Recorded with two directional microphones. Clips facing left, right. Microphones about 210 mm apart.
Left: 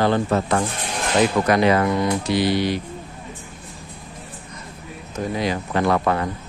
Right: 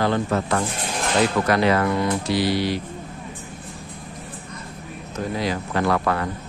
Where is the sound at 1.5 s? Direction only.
15° left (ahead or behind).